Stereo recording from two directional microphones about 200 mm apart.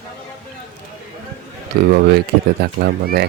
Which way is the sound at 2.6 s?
50° right (ahead or behind).